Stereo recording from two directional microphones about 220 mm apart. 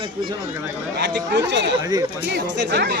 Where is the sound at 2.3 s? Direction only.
50° right (ahead or behind).